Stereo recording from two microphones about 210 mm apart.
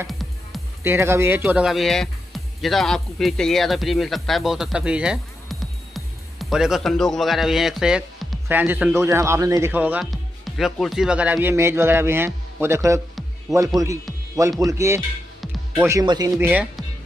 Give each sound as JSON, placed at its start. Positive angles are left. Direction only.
{"t": 0.0, "sound": "music", "side_deg": 0}
{"t": 0.8, "sound": "speech", "side_deg": -10}
{"t": 15.4, "sound": "music", "side_deg": 0}
{"t": 15.9, "sound": "speech", "side_deg": -15}